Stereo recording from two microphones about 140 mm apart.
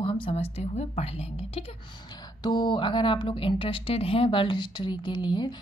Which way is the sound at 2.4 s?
35° left (ahead or behind).